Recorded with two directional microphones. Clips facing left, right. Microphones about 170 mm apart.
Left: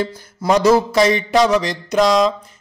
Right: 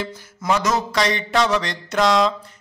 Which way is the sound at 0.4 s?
35° left (ahead or behind).